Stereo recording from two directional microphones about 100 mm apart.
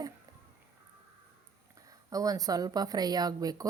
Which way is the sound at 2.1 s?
35° right (ahead or behind).